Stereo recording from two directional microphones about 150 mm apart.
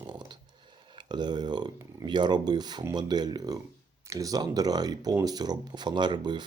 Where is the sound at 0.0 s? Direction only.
30° right (ahead or behind).